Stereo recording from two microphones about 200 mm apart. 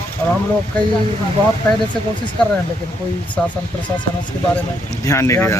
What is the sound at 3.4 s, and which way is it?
Speech, 5° left (ahead or behind).